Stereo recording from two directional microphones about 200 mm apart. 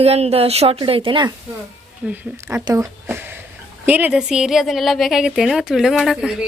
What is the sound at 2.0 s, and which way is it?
A woman's voice, 5° right (ahead or behind).